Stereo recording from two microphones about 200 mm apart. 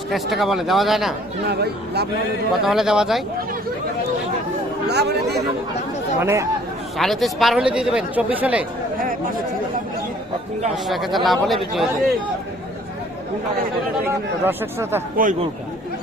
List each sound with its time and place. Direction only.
0.1 s speech: centre (ahead or behind)
1.5 s speech: 55° right (ahead or behind)
2.5 s speech: centre (ahead or behind)
4.9 s speech: 55° right (ahead or behind)
6.1 s speech: 15° right (ahead or behind)
6.9 s speech: centre (ahead or behind)
10.8 s speech: centre (ahead or behind)
14.1 s speech: 10° right (ahead or behind)
15.1 s speech: 40° right (ahead or behind)